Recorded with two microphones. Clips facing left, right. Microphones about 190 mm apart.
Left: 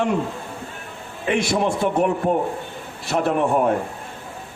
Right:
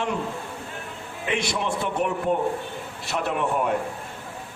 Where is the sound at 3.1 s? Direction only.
45° left (ahead or behind).